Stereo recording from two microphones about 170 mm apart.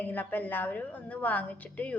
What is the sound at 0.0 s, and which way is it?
A woman's voice, 10° left (ahead or behind).